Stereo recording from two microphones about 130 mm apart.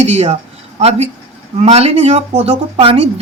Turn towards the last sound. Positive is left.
turn(degrees=-45)  # may be behind; listen again after turning